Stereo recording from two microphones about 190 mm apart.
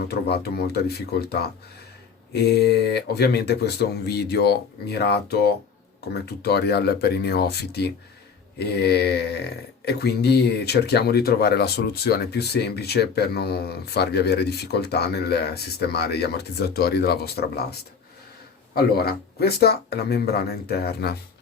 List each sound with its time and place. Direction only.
0.0 s speech: 55° left (ahead or behind)